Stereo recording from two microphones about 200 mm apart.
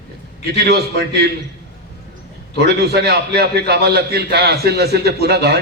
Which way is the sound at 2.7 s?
55° right (ahead or behind).